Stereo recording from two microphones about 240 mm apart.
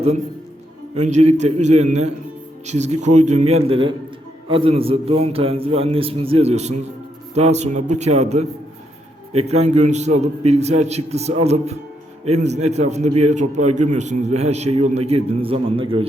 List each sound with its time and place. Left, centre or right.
0.9 s a man's voice: right